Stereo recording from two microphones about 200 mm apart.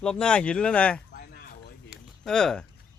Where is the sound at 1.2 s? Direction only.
50° left (ahead or behind).